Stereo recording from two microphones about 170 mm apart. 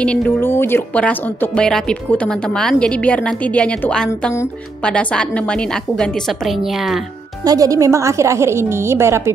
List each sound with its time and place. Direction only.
0.0 s speech: 5° left (ahead or behind)
4.1 s speech: 15° left (ahead or behind); by 7.1 s centre (ahead or behind)
7.4 s a woman's voice: 20° right (ahead or behind)